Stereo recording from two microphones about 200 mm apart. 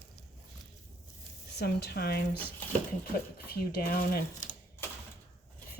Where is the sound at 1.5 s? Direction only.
55° left (ahead or behind).